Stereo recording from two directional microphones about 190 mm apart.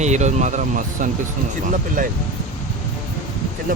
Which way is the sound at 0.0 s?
35° right (ahead or behind).